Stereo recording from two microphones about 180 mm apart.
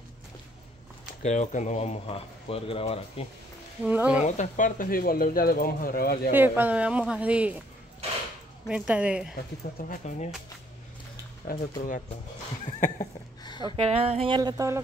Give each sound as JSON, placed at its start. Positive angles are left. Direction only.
{"t": 1.2, "sound": "speech", "side_deg": 45}
{"t": 3.8, "sound": "speech", "side_deg": -10}
{"t": 4.4, "sound": "speech", "side_deg": 45}
{"t": 6.3, "sound": "speech", "side_deg": -10}
{"t": 8.6, "sound": "a woman's voice", "side_deg": -5}
{"t": 9.3, "sound": "speech", "side_deg": 50}
{"t": 11.4, "sound": "speech", "side_deg": 45}
{"t": 13.0, "sound": "a sound", "side_deg": 25}
{"t": 13.6, "sound": "speech", "side_deg": -30}